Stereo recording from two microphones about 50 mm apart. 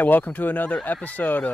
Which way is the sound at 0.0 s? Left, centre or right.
Left.